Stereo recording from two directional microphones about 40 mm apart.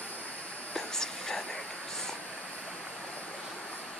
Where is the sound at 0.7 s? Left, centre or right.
Centre.